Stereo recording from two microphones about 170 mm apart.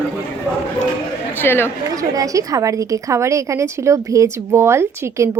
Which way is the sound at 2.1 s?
20° right (ahead or behind).